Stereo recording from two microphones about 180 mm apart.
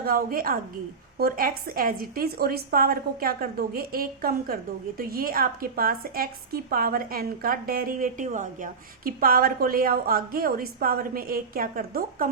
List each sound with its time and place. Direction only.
0.0 s a woman's voice: 55° right (ahead or behind)